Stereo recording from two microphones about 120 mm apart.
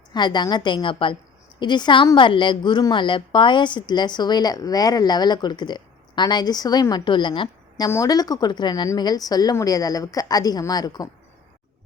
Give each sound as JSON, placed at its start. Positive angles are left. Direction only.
{"t": 0.1, "sound": "a woman's voice", "side_deg": 40}
{"t": 7.9, "sound": "a woman's voice", "side_deg": 25}